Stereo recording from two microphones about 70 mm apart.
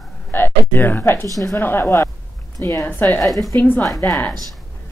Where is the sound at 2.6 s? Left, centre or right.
Left.